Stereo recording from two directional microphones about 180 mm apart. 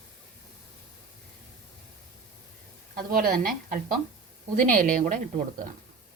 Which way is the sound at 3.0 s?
50° right (ahead or behind).